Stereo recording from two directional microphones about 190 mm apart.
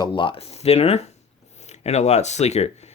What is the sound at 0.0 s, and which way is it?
Speech, 25° left (ahead or behind).